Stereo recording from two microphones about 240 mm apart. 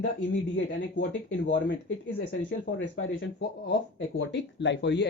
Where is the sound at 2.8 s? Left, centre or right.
Left.